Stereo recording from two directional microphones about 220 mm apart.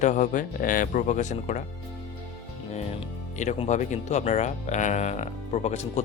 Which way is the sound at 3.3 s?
30° left (ahead or behind).